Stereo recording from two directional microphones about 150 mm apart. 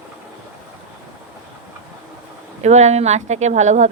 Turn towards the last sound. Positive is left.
turn(degrees=-50)  # may be behind; listen again after turning